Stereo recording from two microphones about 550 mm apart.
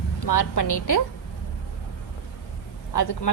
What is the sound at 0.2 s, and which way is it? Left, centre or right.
Speech, left.